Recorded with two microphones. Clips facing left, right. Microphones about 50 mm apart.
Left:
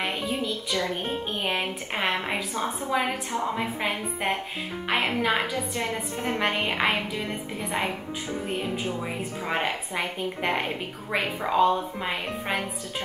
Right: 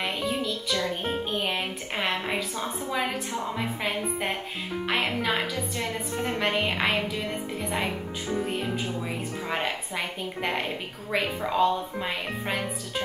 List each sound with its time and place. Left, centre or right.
0.0 s music: centre
0.5 s speech: left
1.3 s a woman's voice: centre
9.5 s a woman's voice: centre